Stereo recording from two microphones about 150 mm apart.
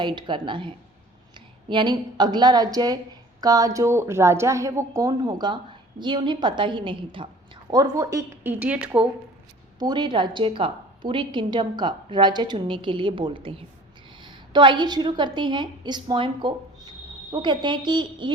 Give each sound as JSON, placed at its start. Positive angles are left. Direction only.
{"t": 0.0, "sound": "a woman's voice", "side_deg": -30}
{"t": 1.7, "sound": "a woman's voice", "side_deg": -30}
{"t": 7.7, "sound": "speech", "side_deg": -25}
{"t": 9.7, "sound": "a woman's voice", "side_deg": -30}